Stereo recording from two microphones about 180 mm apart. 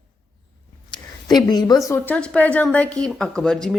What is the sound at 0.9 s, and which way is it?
A woman's voice, 25° left (ahead or behind).